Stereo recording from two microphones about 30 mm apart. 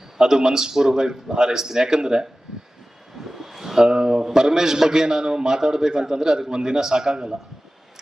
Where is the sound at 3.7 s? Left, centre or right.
Right.